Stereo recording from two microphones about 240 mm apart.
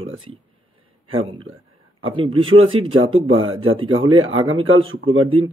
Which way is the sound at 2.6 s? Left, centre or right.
Right.